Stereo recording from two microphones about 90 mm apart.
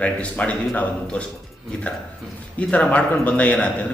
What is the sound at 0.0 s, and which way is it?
Speech, 15° left (ahead or behind).